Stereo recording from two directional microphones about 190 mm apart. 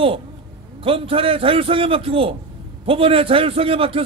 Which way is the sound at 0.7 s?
30° right (ahead or behind).